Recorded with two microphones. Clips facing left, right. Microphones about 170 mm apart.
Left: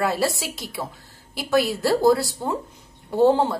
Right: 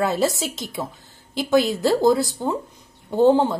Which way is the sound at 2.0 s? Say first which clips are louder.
Right 1 dB; 20° right (ahead or behind).